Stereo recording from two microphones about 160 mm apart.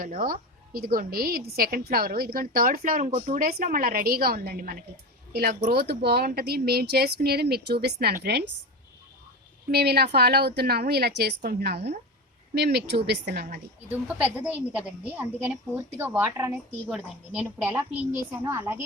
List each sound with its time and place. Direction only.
0.0 s a woman's voice: 60° right (ahead or behind)
5.3 s speech: 80° right
9.7 s speech: 85° right
13.9 s a woman's voice: 10° right (ahead or behind)